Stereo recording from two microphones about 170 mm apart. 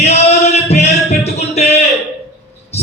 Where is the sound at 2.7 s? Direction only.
40° left (ahead or behind).